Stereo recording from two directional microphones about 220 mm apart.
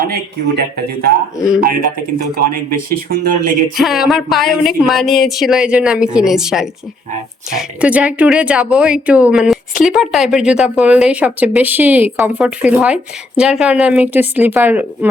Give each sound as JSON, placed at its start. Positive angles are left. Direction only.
{"t": 0.0, "sound": "speech", "side_deg": -45}
{"t": 2.1, "sound": "speech", "side_deg": -40}
{"t": 3.8, "sound": "speech", "side_deg": 0}